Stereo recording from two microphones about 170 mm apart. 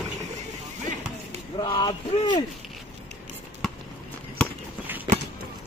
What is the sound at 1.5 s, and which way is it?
Speech, 25° left (ahead or behind).